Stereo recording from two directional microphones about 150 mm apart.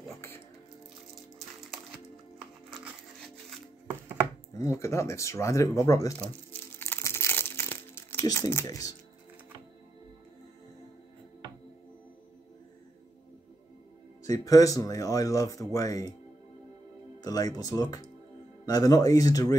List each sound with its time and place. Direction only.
4.6 s speech: 20° left (ahead or behind)
6.1 s crumpling: 15° left (ahead or behind)
14.2 s speech: 20° left (ahead or behind)
17.2 s speech: 25° left (ahead or behind)